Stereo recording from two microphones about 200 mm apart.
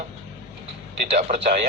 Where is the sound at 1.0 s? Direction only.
35° right (ahead or behind).